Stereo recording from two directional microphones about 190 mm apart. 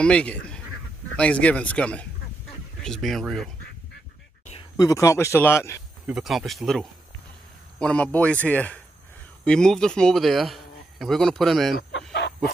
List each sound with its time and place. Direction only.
0.0 s a man's voice: 5° left (ahead or behind)
4.6 s speech: 20° left (ahead or behind)
6.0 s speech: centre (ahead or behind)
11.9 s chicken: 65° left (ahead or behind)